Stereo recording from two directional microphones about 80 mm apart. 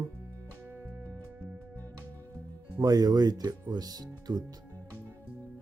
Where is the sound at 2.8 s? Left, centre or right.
Right.